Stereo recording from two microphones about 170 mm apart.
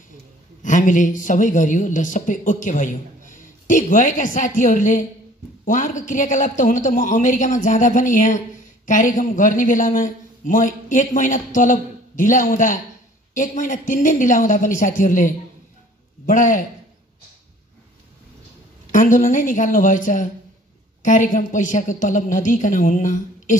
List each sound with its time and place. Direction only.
0.6 s a man's voice: 50° left (ahead or behind)
18.9 s a man's voice: 50° left (ahead or behind)